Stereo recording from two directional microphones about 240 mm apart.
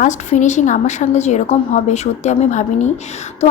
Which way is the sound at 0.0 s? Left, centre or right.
Left.